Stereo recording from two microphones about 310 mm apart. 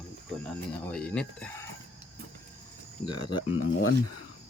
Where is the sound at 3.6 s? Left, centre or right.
Left.